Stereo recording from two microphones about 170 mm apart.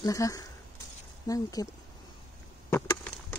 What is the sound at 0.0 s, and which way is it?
Speech, 20° left (ahead or behind).